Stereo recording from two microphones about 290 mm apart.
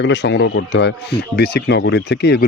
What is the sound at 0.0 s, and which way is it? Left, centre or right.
Speech, left.